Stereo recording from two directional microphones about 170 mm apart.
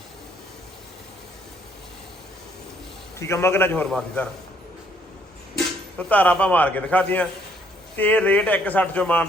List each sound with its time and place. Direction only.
3.2 s a man's voice: 15° left (ahead or behind)
6.0 s a man's voice: 10° left (ahead or behind)